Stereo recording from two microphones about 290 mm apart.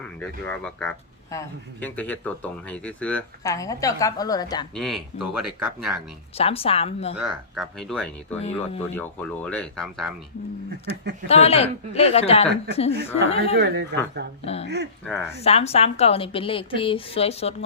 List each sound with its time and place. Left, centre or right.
0.2 s speech: centre
4.7 s speech: centre
6.3 s a woman's voice: centre
7.2 s speech: centre
8.4 s a woman's voice: centre
9.0 s speech: centre
11.3 s a woman's voice: left
13.6 s speech: right
14.4 s a woman's voice: left
15.0 s speech: centre
15.4 s a woman's voice: left